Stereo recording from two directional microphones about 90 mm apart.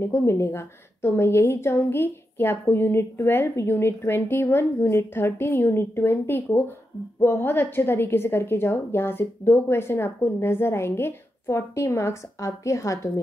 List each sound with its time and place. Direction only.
0.0 s a woman's voice: 30° left (ahead or behind)